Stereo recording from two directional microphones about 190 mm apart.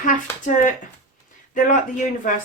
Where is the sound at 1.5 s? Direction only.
40° left (ahead or behind).